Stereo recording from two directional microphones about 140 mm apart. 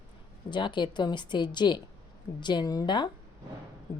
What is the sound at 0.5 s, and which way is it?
Speech, 35° left (ahead or behind).